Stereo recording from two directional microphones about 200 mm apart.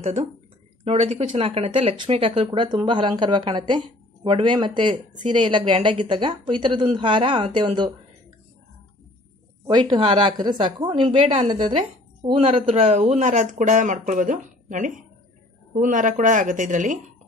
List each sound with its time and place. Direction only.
0.8 s speech: 30° right (ahead or behind)
9.7 s a woman's voice: 20° right (ahead or behind); by 17.0 s 40° right (ahead or behind)